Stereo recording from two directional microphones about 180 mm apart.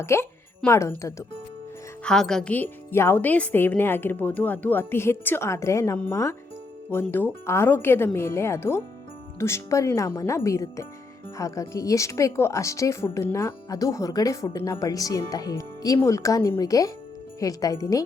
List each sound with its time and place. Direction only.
0.0 s speech: 15° left (ahead or behind)
2.0 s speech: 5° left (ahead or behind); by 18.0 s 20° left (ahead or behind)